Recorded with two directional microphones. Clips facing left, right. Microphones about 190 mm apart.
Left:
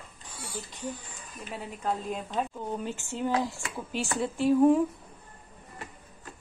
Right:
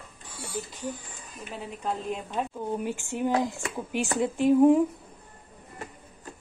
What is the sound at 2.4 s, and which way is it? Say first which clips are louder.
Speech: right 2 dB; 10° right (ahead or behind).